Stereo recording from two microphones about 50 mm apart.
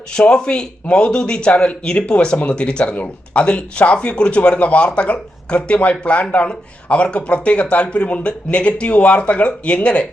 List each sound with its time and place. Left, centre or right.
0.1 s speech: centre